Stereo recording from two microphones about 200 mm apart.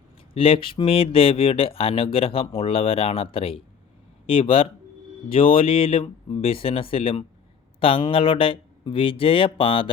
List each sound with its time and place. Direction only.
0.3 s speech: 25° left (ahead or behind)